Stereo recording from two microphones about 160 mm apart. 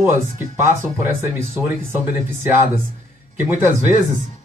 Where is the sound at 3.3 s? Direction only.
15° right (ahead or behind).